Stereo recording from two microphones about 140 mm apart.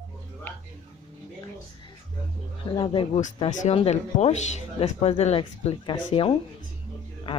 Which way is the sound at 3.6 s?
50° left (ahead or behind).